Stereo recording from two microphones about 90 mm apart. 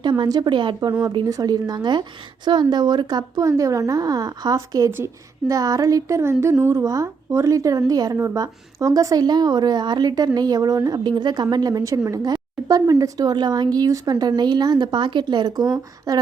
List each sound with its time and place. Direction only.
0.0 s a woman's voice: 55° right (ahead or behind)
4.9 s a woman's voice: 25° right (ahead or behind)
5.5 s a woman's voice: 40° right (ahead or behind)